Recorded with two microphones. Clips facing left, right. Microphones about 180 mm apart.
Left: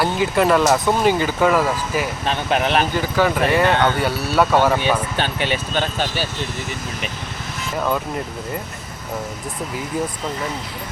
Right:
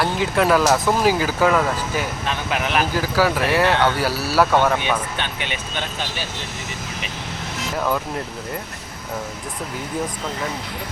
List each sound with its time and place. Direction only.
0.0 s speech: centre (ahead or behind)
2.2 s speech: 35° left (ahead or behind)
2.9 s speech: 5° right (ahead or behind)
5.1 s speech: 35° left (ahead or behind)
7.8 s speech: centre (ahead or behind)